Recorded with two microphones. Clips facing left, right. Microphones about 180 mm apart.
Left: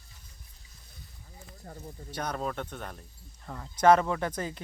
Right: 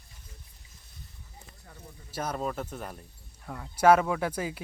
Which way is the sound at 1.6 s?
40° left (ahead or behind).